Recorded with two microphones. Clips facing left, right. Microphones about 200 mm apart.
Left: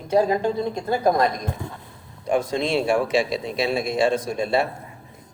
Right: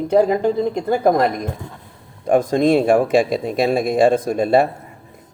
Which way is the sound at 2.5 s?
50° right (ahead or behind).